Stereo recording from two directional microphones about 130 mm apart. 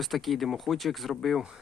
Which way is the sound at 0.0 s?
Centre (ahead or behind).